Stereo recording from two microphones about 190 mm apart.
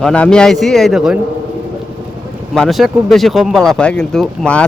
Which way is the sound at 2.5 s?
Centre (ahead or behind).